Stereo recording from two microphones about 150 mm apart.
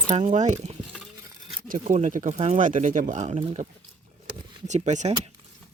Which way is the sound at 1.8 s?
50° right (ahead or behind).